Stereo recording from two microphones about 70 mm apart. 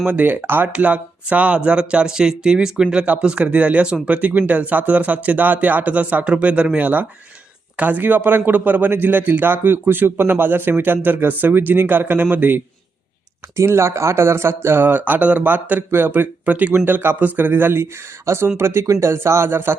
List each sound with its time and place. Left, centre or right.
0.0 s a man's voice: right
0.7 s a man's voice: centre
13.6 s a man's voice: right